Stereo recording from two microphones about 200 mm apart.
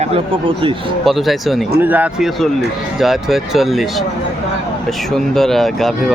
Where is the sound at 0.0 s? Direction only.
30° right (ahead or behind).